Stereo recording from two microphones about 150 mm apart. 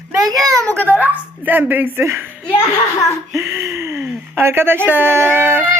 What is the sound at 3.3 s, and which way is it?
Speech, 15° right (ahead or behind).